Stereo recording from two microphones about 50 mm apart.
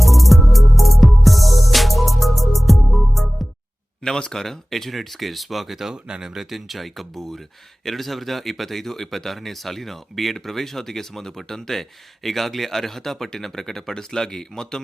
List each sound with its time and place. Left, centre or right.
0.0 s music: centre
4.0 s speech: centre